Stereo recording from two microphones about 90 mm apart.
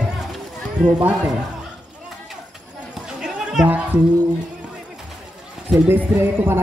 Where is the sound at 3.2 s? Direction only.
5° right (ahead or behind).